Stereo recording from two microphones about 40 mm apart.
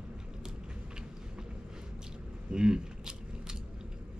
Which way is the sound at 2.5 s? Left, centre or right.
Centre.